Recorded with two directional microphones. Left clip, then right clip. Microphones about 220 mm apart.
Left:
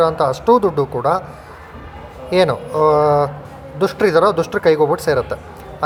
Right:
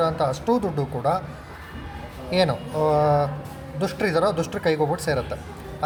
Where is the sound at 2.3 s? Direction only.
20° left (ahead or behind).